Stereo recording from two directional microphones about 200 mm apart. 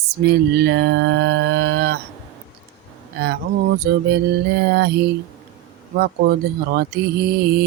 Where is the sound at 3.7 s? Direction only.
55° right (ahead or behind).